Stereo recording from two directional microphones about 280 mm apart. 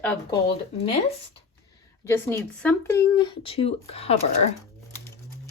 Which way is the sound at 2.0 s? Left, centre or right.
Centre.